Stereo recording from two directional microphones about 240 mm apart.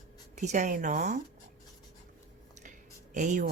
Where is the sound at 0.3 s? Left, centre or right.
Right.